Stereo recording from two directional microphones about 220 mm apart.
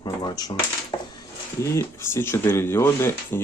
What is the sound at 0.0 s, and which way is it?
Speech, 20° left (ahead or behind).